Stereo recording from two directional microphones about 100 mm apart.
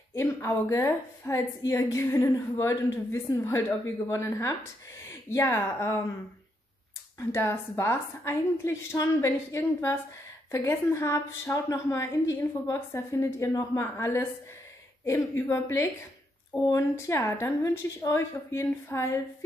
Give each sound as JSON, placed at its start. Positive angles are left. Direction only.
{"t": 0.1, "sound": "a woman's voice", "side_deg": 25}
{"t": 7.2, "sound": "a woman's voice", "side_deg": 25}
{"t": 16.5, "sound": "speech", "side_deg": 65}
{"t": 16.9, "sound": "a woman's voice", "side_deg": 25}